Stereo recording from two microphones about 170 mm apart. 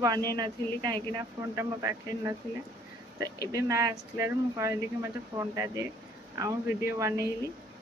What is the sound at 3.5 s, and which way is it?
Speech, 20° right (ahead or behind).